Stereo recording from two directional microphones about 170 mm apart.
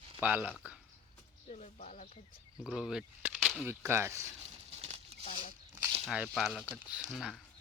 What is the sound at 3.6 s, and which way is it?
Speech, 15° right (ahead or behind).